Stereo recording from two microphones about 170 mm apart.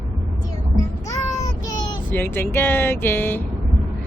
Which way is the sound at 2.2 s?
15° left (ahead or behind).